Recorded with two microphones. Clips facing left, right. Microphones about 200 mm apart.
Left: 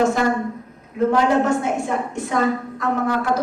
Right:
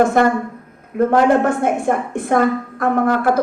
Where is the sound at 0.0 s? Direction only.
55° right (ahead or behind).